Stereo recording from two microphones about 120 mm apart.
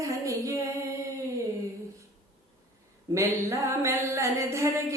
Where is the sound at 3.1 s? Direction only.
25° right (ahead or behind).